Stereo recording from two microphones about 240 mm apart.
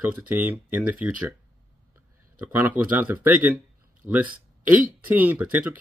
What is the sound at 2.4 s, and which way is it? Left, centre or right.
Speech, centre.